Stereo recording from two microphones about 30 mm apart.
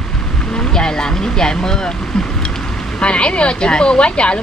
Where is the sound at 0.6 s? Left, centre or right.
Left.